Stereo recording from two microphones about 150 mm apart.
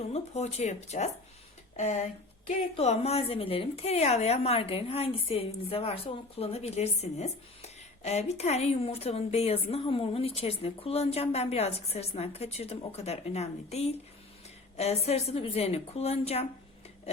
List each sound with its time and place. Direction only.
0.0 s a woman's voice: 45° left (ahead or behind)